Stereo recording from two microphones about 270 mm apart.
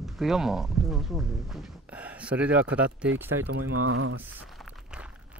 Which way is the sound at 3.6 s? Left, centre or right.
Right.